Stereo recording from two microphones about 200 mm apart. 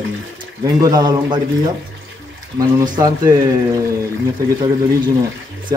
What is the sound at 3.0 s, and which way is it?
Speech, 15° right (ahead or behind).